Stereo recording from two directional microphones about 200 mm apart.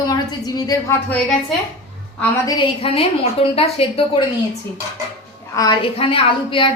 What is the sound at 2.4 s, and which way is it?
A woman's voice, 25° left (ahead or behind).